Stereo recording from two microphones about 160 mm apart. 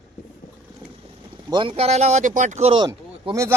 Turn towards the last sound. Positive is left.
turn(degrees=-20)  # may be behind; listen again after turning